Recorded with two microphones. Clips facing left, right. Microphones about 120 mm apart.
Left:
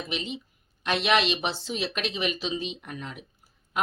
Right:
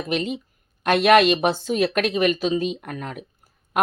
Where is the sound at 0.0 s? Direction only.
50° right (ahead or behind).